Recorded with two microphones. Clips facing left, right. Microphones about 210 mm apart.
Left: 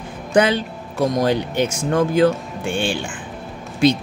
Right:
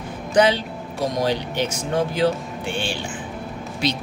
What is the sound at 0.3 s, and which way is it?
Speech, 55° left (ahead or behind).